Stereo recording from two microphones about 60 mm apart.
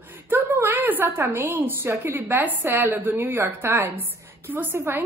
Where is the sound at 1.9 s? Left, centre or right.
Right.